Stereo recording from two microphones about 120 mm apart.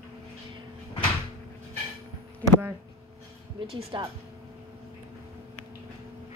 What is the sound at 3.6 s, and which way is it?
Speech, 45° right (ahead or behind).